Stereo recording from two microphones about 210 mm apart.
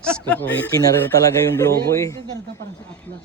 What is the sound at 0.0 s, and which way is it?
Speech, 5° left (ahead or behind).